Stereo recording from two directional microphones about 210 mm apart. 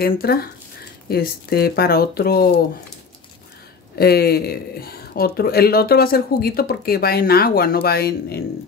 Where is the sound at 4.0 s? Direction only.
50° left (ahead or behind).